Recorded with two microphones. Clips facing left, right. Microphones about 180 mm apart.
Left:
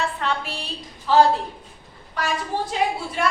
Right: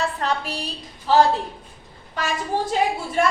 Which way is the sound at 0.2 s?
40° right (ahead or behind).